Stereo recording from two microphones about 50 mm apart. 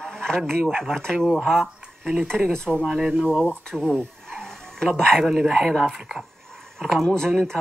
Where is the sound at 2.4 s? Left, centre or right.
Centre.